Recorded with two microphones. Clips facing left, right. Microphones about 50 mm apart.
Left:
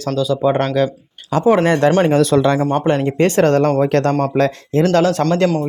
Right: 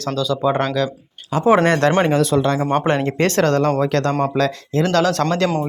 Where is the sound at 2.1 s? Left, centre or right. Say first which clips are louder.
Left 3 dB; left.